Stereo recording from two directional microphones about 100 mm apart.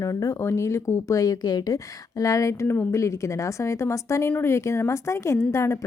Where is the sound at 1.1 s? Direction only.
35° left (ahead or behind).